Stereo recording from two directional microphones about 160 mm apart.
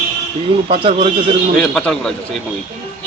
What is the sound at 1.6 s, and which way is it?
Speech, 5° left (ahead or behind).